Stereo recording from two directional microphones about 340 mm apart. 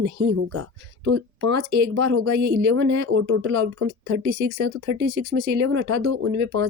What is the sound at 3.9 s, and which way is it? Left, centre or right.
Speech, right.